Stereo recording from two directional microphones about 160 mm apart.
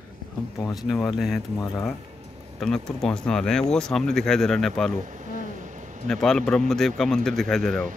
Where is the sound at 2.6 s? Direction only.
5° left (ahead or behind).